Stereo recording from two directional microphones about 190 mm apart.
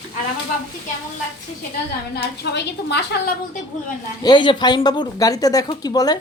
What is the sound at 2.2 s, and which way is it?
A woman's voice, 60° left (ahead or behind).